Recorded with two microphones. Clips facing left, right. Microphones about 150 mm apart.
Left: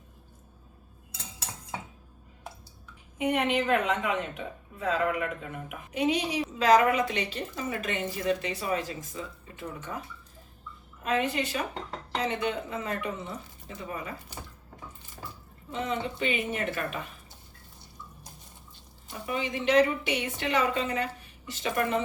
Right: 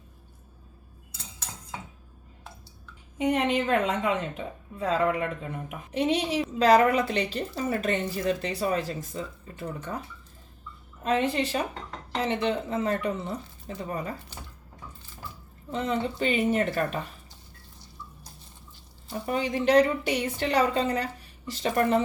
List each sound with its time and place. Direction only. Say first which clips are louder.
3.2 s a woman's voice: right 2 dB; 30° right (ahead or behind)
11.0 s a woman's voice: right 3 dB; 30° right (ahead or behind)
15.7 s a woman's voice: right 3 dB; 35° right (ahead or behind)
19.2 s a woman's voice: right 4 dB; 40° right (ahead or behind)